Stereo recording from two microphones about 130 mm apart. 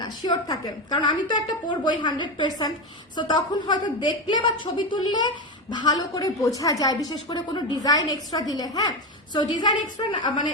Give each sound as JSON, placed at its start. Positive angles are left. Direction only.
{"t": 0.0, "sound": "a woman's voice", "side_deg": 35}
{"t": 10.0, "sound": "a woman's voice", "side_deg": 35}